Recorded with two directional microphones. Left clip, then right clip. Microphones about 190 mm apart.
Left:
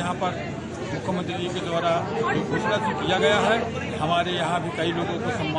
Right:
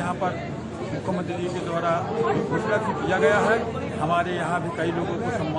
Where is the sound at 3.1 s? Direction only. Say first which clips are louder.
Right 1 dB; centre (ahead or behind).